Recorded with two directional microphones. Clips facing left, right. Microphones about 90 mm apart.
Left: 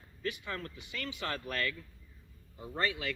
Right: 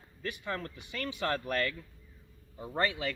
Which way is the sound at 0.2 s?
35° right (ahead or behind).